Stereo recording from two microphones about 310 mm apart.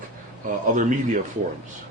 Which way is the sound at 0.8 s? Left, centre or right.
Right.